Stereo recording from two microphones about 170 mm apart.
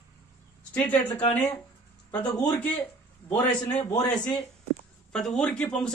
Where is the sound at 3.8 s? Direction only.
20° left (ahead or behind).